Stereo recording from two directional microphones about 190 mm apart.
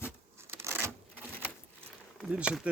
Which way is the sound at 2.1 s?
5° right (ahead or behind).